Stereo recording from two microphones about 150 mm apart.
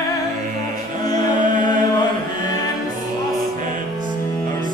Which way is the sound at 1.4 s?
60° right (ahead or behind).